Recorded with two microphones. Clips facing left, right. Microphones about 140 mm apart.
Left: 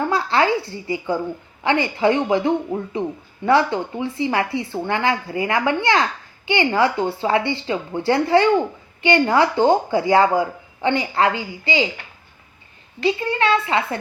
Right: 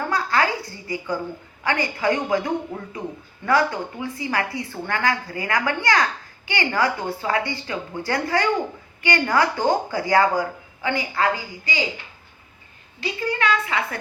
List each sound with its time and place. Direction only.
0.1 s a woman's voice: 25° left (ahead or behind)
13.1 s a woman's voice: 30° left (ahead or behind)